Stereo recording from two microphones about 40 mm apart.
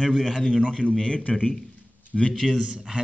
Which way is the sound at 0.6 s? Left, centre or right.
Left.